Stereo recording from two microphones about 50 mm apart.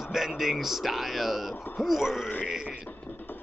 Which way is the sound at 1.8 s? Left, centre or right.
Centre.